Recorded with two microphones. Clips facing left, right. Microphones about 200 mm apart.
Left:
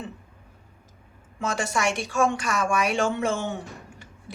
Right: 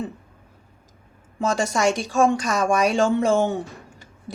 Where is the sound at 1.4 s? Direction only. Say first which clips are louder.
Right 5 dB; 35° right (ahead or behind).